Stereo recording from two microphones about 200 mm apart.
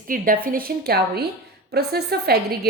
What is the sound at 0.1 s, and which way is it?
A woman's voice, 45° right (ahead or behind).